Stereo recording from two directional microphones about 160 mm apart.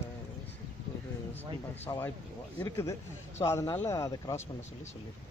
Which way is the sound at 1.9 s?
20° left (ahead or behind).